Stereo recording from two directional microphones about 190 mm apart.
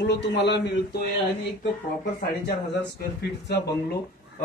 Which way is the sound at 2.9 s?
60° left (ahead or behind).